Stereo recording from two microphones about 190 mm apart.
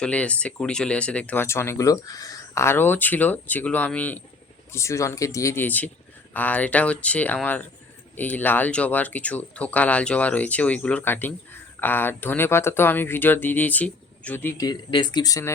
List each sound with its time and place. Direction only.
0.0 s speech: 5° left (ahead or behind)